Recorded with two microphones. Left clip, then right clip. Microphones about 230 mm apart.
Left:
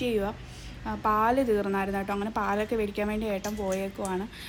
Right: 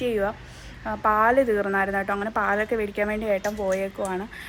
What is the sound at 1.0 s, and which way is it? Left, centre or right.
A woman's voice, right.